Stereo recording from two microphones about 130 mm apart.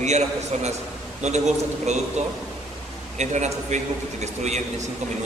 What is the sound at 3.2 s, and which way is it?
A man's voice, 60° right (ahead or behind).